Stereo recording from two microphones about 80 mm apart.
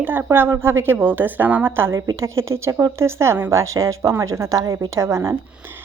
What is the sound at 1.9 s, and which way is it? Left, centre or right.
Speech, right.